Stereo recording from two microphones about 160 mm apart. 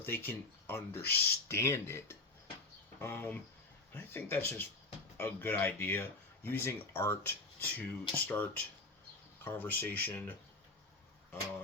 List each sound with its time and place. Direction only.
0.0 s speech: 15° left (ahead or behind)